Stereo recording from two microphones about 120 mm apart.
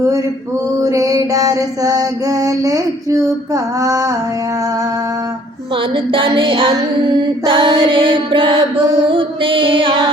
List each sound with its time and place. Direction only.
0.0 s a sound: 25° right (ahead or behind)
0.8 s mantra: 30° right (ahead or behind)
5.7 s music: 45° right (ahead or behind)